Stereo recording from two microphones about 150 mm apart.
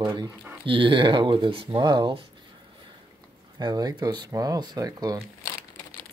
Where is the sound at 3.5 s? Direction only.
30° right (ahead or behind).